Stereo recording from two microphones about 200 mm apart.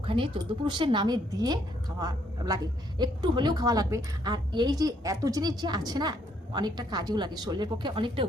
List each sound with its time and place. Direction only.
0.0 s a woman's voice: 25° right (ahead or behind)